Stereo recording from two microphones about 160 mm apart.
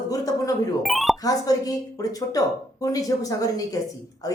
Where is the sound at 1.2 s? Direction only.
20° left (ahead or behind).